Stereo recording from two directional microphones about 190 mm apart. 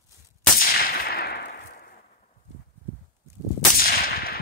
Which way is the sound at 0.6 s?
50° left (ahead or behind).